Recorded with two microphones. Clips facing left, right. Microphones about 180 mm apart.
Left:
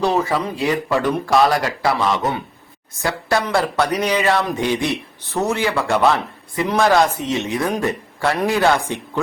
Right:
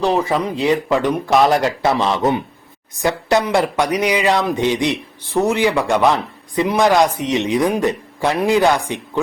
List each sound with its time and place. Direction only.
0.0 s speech: 15° right (ahead or behind)